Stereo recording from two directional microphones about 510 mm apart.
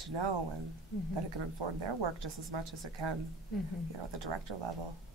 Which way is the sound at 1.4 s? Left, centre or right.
Right.